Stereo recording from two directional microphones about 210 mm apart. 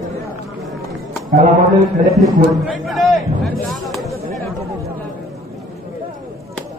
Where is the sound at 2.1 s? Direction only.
Centre (ahead or behind).